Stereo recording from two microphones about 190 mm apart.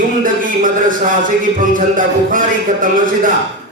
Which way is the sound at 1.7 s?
45° right (ahead or behind).